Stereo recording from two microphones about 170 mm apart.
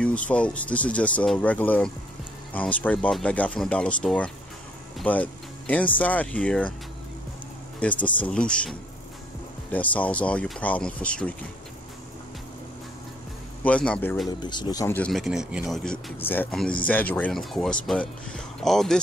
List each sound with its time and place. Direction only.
0.3 s speech: 10° left (ahead or behind)
7.8 s speech: 10° left (ahead or behind)
13.7 s speech: 5° left (ahead or behind)
14.4 s speech: 25° left (ahead or behind)
15.0 s speech: 5° left (ahead or behind)